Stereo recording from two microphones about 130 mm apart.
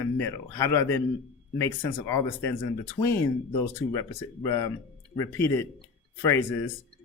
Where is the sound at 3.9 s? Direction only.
25° left (ahead or behind).